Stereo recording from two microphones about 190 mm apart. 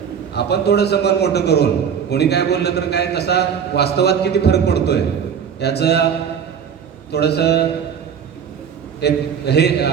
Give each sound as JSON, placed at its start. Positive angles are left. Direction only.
{"t": 0.3, "sound": "a man's voice", "side_deg": 60}
{"t": 7.1, "sound": "a man's voice", "side_deg": 60}
{"t": 9.0, "sound": "a man's voice", "side_deg": 60}